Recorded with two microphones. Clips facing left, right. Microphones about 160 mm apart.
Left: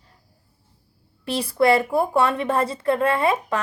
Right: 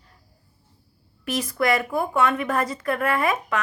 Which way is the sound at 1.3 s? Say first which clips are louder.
Left 4 dB; 30° left (ahead or behind).